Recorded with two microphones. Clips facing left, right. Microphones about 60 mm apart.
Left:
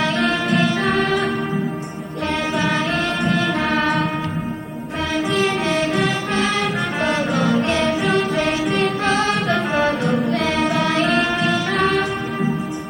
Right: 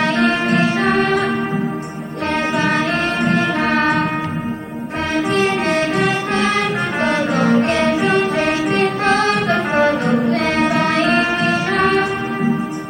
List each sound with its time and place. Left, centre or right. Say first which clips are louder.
0.0 s music: right 3 dB; right
3.2 s music: right 3 dB; right
5.1 s music: right 3 dB; right